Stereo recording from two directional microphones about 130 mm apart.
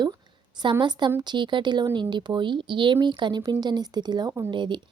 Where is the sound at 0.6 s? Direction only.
35° right (ahead or behind).